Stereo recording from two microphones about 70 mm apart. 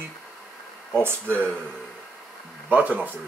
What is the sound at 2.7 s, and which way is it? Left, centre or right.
Speech, right.